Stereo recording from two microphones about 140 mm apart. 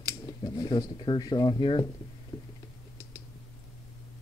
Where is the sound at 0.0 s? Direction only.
30° left (ahead or behind).